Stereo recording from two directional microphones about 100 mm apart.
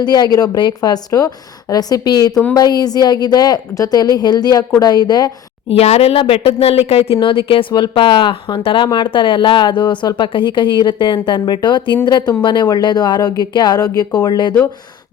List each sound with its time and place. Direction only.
0.0 s a woman's voice: 45° left (ahead or behind)
5.6 s speech: 90° left; by 14.5 s 45° left (ahead or behind)